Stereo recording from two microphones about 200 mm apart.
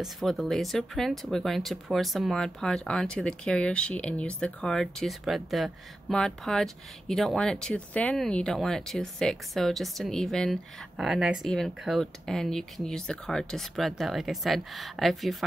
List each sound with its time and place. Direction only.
0.0 s speech: centre (ahead or behind)